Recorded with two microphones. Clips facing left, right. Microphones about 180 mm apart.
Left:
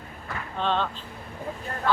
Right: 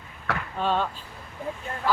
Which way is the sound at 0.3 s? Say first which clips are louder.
Right 6 dB; 75° right (ahead or behind).